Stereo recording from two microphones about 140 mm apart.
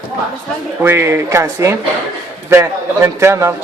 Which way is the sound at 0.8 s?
15° right (ahead or behind).